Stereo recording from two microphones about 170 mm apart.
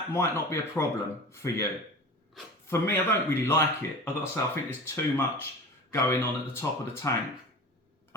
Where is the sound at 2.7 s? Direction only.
15° left (ahead or behind).